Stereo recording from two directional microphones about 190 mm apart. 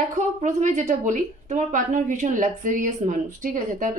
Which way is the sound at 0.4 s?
40° right (ahead or behind).